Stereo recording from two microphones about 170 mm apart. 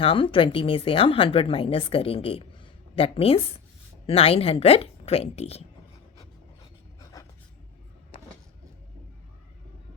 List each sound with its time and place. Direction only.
0.0 s a woman's voice: 30° left (ahead or behind)
7.0 s writing: 20° left (ahead or behind)